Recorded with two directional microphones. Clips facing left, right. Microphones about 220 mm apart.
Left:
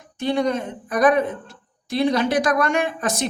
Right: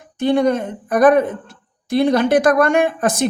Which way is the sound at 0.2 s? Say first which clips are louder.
Right 6 dB; 55° right (ahead or behind).